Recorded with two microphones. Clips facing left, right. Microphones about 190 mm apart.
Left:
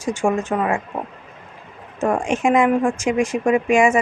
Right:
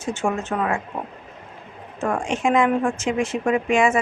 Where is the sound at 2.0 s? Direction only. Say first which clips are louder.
Left 4 dB; 15° left (ahead or behind).